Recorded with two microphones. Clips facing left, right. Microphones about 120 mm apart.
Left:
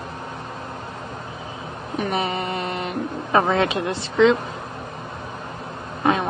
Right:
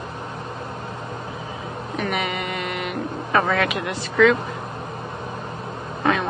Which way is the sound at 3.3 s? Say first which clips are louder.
Left 2 dB; 25° left (ahead or behind).